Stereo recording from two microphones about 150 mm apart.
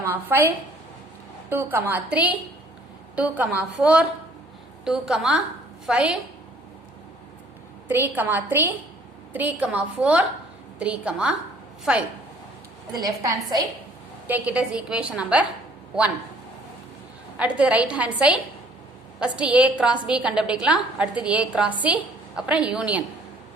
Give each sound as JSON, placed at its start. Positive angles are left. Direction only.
{"t": 0.0, "sound": "a woman's voice", "side_deg": -15}
{"t": 7.9, "sound": "a woman's voice", "side_deg": -15}
{"t": 13.0, "sound": "a woman's voice", "side_deg": -25}
{"t": 14.3, "sound": "a woman's voice", "side_deg": -10}
{"t": 17.3, "sound": "a woman's voice", "side_deg": -5}